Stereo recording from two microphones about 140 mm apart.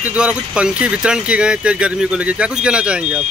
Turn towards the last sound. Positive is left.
turn(degrees=-5)  # may be behind; listen again after turning